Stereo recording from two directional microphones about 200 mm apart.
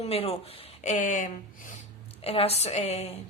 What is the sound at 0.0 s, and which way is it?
A woman's voice, 30° left (ahead or behind).